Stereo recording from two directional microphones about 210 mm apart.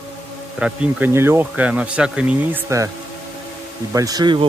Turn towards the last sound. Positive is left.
turn(degrees=-20)  # may be behind; listen again after turning